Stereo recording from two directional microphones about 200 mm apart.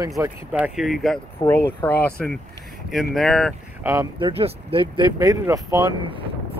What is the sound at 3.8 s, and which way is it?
Speech, 20° right (ahead or behind).